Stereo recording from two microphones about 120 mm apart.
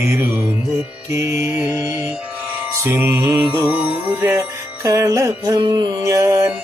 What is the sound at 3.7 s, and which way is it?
Music, 10° right (ahead or behind).